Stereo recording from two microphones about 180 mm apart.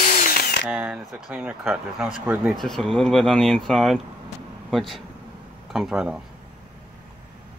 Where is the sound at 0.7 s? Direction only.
5° right (ahead or behind).